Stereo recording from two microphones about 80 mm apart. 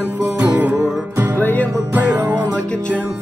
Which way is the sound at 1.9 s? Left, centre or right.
Right.